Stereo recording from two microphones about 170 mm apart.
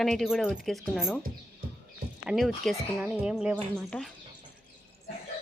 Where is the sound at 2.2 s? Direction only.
Centre (ahead or behind).